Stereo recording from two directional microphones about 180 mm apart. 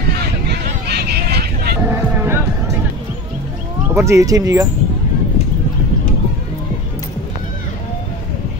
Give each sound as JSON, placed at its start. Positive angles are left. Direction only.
{"t": 0.1, "sound": "vehicle", "side_deg": -65}
{"t": 1.9, "sound": "music", "side_deg": -15}
{"t": 3.9, "sound": "speech", "side_deg": -15}